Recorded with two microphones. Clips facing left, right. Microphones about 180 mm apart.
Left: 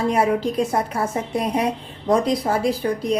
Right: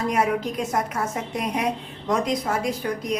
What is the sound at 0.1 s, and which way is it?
A woman's voice, 30° left (ahead or behind).